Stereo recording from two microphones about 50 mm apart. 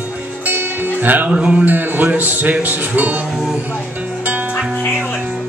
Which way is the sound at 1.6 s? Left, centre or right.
Right.